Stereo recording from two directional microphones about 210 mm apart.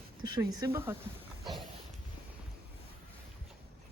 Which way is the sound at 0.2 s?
20° right (ahead or behind).